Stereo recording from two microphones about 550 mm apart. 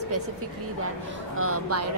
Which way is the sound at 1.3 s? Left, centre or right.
Right.